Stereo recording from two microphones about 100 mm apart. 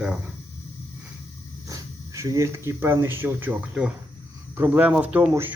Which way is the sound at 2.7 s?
25° right (ahead or behind).